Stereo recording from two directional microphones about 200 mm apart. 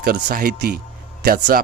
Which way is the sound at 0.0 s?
45° right (ahead or behind).